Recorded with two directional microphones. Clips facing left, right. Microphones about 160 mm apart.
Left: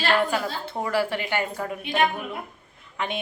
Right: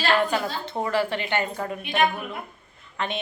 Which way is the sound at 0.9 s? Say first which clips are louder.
Even; 10° left (ahead or behind).